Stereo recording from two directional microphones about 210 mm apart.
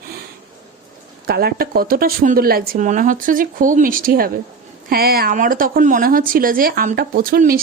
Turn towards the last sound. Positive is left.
turn(degrees=-45)  # may be behind; listen again after turning